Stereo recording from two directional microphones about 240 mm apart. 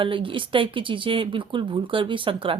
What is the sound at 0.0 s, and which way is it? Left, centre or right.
Speech, right.